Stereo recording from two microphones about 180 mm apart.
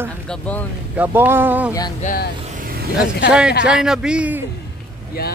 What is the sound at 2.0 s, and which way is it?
Speech, 50° left (ahead or behind).